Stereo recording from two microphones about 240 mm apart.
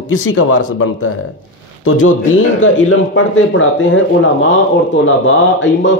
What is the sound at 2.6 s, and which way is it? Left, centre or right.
A man's voice, left.